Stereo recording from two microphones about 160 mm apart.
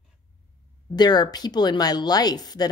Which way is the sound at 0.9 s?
25° left (ahead or behind).